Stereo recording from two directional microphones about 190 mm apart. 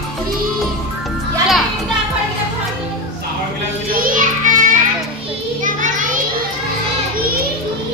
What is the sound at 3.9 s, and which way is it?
Music, 45° right (ahead or behind).